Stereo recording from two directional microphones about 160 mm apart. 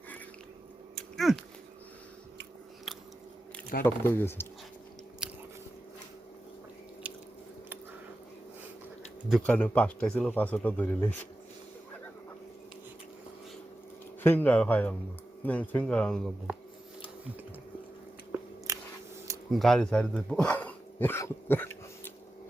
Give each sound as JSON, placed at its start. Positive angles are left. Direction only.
{"t": 1.1, "sound": "dog", "side_deg": 0}
{"t": 2.9, "sound": "biting", "side_deg": 0}
{"t": 3.8, "sound": "speech", "side_deg": 15}
{"t": 5.2, "sound": "biting", "side_deg": -5}
{"t": 9.3, "sound": "speech", "side_deg": 10}
{"t": 14.2, "sound": "speech", "side_deg": 10}
{"t": 18.7, "sound": "scissors", "side_deg": -20}
{"t": 19.5, "sound": "speech", "side_deg": 0}